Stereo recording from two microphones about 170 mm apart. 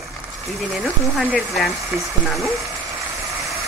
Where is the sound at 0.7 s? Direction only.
5° right (ahead or behind).